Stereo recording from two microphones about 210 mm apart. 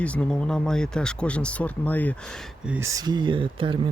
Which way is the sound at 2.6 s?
10° right (ahead or behind).